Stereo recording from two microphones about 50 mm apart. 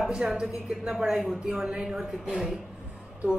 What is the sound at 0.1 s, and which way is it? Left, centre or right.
Speech, centre.